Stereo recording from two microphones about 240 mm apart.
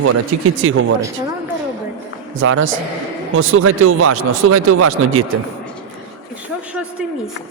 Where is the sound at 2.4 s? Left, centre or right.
Right.